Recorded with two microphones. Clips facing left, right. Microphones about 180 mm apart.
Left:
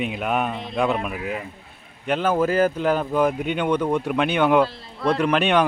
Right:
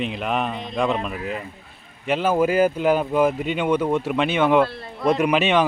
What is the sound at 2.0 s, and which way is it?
Speech, 5° right (ahead or behind).